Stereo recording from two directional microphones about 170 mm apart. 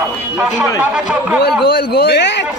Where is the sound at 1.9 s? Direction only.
70° left (ahead or behind); by 2.4 s 90° left.